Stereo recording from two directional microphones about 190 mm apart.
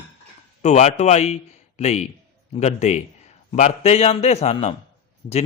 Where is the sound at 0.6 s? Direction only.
35° left (ahead or behind).